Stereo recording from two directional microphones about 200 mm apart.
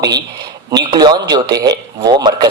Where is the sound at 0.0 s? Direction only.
20° right (ahead or behind).